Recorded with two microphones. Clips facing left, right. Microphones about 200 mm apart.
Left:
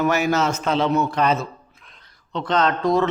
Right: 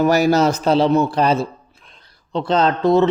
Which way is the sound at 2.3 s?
30° right (ahead or behind).